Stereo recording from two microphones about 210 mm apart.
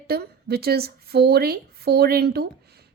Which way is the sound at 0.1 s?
50° right (ahead or behind).